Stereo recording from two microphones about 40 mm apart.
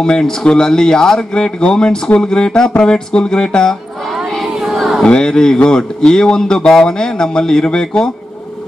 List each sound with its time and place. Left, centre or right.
0.0 s a man's voice: centre
4.7 s a sound: centre
5.0 s a man's voice: centre